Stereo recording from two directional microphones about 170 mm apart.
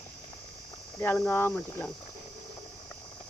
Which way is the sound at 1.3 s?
15° left (ahead or behind).